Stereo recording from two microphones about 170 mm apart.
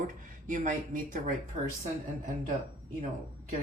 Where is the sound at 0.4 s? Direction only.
50° right (ahead or behind).